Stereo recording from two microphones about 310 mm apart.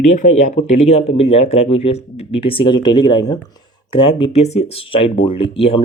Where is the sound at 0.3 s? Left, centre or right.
Left.